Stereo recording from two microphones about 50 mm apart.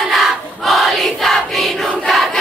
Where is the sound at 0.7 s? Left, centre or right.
Centre.